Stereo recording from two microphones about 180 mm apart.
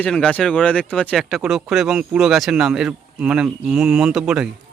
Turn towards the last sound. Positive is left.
turn(degrees=-5)  # may be behind; listen again after turning